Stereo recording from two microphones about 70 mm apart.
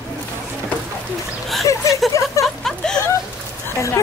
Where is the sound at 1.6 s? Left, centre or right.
Left.